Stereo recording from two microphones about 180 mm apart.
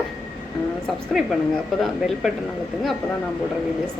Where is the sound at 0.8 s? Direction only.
Centre (ahead or behind).